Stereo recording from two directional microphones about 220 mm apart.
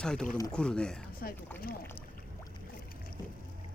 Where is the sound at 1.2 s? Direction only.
45° left (ahead or behind).